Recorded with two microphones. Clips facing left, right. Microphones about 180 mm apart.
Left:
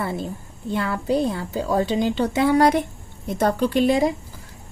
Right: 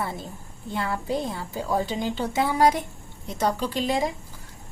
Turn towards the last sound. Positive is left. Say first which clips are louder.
# left 7 dB
turn(degrees=65)  # may be behind; listen again after turning